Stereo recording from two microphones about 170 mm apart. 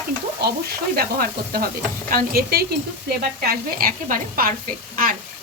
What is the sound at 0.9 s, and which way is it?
Speech, 60° right (ahead or behind).